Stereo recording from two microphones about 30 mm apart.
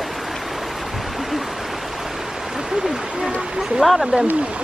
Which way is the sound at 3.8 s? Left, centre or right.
Centre.